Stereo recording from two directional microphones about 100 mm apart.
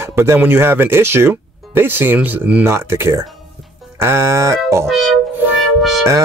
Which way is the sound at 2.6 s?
25° right (ahead or behind).